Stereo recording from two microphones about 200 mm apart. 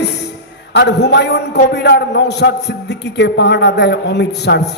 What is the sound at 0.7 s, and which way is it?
A man's voice, 60° left (ahead or behind).